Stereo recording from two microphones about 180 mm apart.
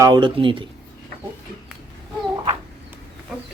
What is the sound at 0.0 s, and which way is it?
Speech, 25° right (ahead or behind).